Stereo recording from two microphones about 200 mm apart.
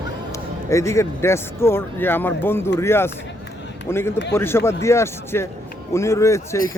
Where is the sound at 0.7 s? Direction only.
15° left (ahead or behind).